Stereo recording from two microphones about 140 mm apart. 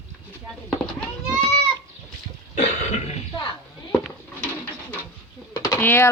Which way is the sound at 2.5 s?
50° left (ahead or behind).